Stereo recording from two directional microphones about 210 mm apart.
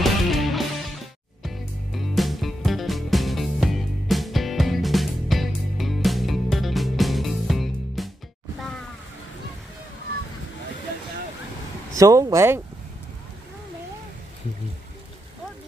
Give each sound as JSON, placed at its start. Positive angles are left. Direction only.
{"t": 0.0, "sound": "music", "side_deg": 0}
{"t": 11.9, "sound": "speech", "side_deg": -15}